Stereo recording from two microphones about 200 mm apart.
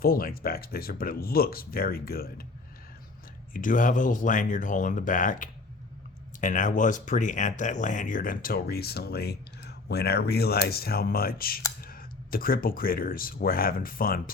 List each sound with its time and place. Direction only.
0.0 s speech: 50° left (ahead or behind)
3.5 s speech: 40° left (ahead or behind)